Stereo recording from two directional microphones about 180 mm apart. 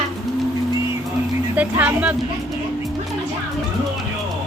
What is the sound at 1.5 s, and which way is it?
Speech, 10° right (ahead or behind).